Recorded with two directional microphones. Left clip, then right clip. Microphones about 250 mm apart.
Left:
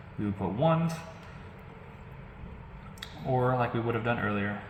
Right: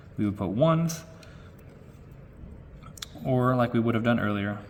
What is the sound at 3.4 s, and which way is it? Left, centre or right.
Speech, right.